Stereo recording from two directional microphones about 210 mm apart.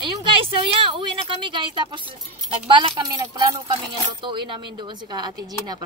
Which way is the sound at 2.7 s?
20° right (ahead or behind).